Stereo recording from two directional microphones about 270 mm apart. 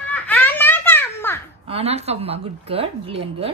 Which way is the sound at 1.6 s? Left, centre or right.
Right.